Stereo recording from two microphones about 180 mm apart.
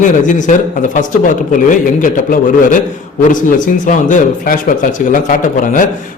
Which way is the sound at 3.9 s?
45° left (ahead or behind).